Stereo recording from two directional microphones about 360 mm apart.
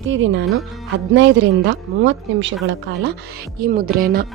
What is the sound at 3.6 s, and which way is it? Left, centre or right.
Speech, right.